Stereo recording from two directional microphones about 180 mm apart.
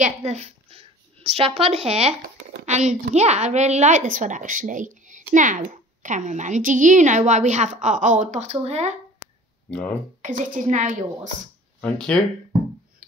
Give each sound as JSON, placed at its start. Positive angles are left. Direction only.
{"t": 0.0, "sound": "a woman's voice", "side_deg": -40}
{"t": 9.7, "sound": "speech", "side_deg": 5}
{"t": 10.2, "sound": "a woman's voice", "side_deg": -45}
{"t": 11.8, "sound": "speech", "side_deg": 5}